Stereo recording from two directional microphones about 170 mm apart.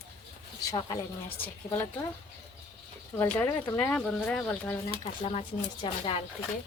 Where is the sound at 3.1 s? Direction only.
10° left (ahead or behind).